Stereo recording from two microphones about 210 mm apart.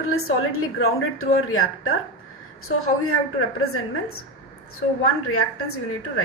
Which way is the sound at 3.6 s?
90° left.